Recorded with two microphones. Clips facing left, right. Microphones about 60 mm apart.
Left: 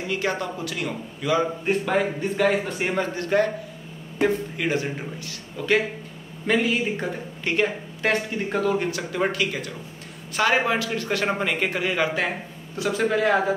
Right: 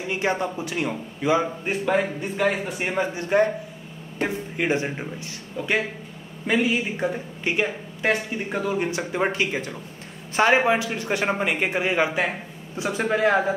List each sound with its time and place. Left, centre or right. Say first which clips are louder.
0.1 s a man's voice: right 2 dB; right
1.7 s speech: even; centre
3.2 s speech: right 2 dB; centre
4.6 s a man's voice: right 1 dB; right
6.4 s a man's voice: even; centre